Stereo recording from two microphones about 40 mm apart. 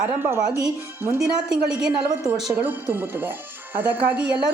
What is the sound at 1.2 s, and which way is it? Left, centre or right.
Speech, centre.